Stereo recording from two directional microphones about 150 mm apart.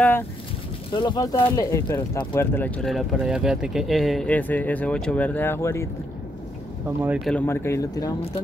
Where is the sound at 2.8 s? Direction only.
Centre (ahead or behind); by 5.9 s 20° left (ahead or behind).